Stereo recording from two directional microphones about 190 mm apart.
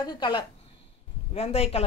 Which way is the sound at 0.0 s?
25° left (ahead or behind).